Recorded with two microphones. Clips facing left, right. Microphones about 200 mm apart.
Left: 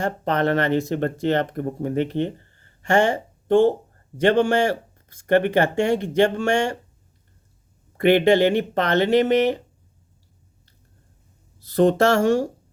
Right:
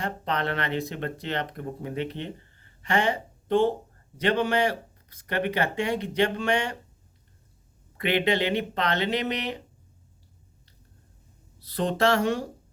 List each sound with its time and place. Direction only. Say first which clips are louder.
0.0 s speech: left 7 dB; 45° left (ahead or behind)
7.9 s speech: left 9 dB; 45° left (ahead or behind)
11.6 s speech: left 7 dB; 45° left (ahead or behind)